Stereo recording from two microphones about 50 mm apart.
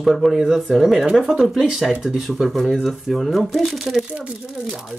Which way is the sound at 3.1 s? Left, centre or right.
Centre.